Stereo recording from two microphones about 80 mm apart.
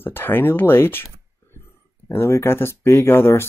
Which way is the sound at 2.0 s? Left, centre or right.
Left.